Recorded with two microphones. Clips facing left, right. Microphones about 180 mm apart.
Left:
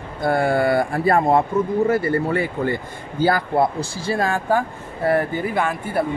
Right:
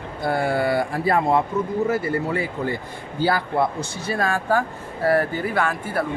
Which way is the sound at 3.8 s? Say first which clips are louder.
Left 3 dB; 30° left (ahead or behind).